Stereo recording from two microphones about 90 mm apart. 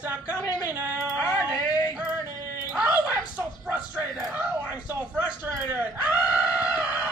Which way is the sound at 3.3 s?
15° right (ahead or behind).